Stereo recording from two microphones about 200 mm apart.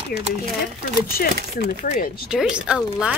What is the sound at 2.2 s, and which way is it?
Speech, 5° right (ahead or behind).